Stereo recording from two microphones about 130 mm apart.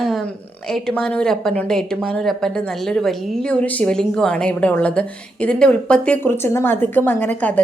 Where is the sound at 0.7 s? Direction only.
5° left (ahead or behind).